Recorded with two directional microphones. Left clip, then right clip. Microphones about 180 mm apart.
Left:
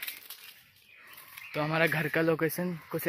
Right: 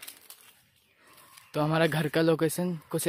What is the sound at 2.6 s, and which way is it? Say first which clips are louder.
Speech: right 3 dB; 30° right (ahead or behind).